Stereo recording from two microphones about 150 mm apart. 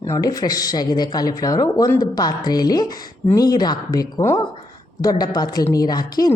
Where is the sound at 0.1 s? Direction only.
25° left (ahead or behind).